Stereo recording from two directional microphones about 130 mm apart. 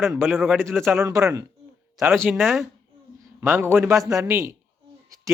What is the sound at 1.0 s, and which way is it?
Speech, 25° right (ahead or behind).